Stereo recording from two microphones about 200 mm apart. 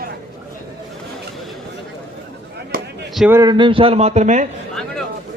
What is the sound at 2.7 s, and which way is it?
Basketball bounce, 45° right (ahead or behind).